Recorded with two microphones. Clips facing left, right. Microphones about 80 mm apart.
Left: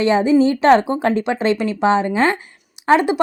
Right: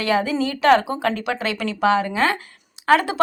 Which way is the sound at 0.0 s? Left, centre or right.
Left.